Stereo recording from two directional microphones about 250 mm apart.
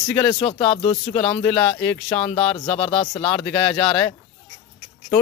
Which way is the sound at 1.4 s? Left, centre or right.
Centre.